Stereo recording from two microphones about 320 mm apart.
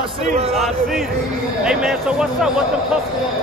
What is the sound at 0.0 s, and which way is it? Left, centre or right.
Speech, centre.